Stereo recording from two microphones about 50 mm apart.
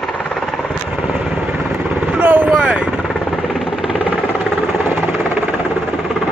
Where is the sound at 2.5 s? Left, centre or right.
Right.